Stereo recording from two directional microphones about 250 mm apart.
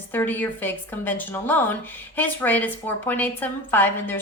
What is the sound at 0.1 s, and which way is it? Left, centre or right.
A woman's voice, centre.